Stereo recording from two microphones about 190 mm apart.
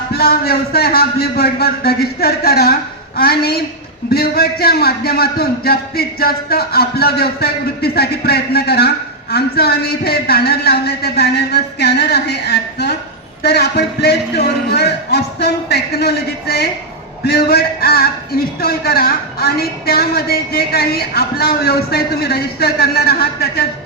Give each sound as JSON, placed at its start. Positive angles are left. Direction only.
{"t": 0.1, "sound": "a woman's voice", "side_deg": 55}